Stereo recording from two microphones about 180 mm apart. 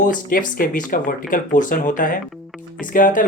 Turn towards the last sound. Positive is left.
turn(degrees=50)  # may be behind; listen again after turning